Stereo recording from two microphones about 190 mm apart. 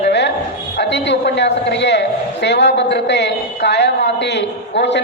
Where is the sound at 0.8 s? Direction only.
65° left (ahead or behind).